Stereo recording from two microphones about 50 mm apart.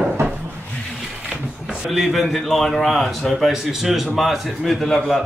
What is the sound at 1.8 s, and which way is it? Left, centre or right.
A man's voice, centre.